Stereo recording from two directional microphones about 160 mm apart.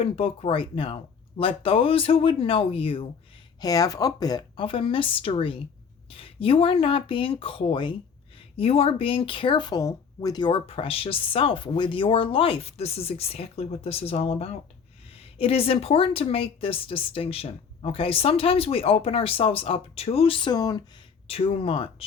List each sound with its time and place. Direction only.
0.0 s speech: 35° left (ahead or behind)
3.6 s speech: 25° left (ahead or behind)
21.2 s speech: 35° left (ahead or behind)